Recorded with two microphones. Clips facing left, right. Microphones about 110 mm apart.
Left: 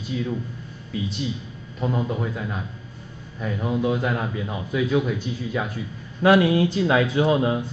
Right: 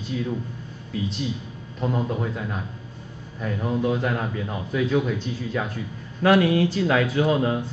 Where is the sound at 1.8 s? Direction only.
Centre (ahead or behind).